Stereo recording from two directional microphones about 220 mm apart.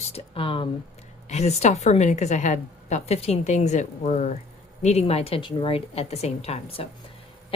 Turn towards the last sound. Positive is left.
turn(degrees=25)  # may be behind; listen again after turning